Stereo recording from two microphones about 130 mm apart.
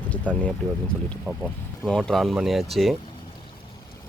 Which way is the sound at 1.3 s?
15° right (ahead or behind).